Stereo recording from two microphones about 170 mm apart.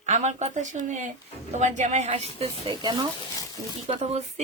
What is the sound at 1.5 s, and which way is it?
Speech, 45° right (ahead or behind).